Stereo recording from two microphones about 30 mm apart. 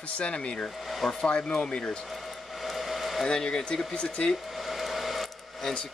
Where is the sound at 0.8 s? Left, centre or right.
Centre.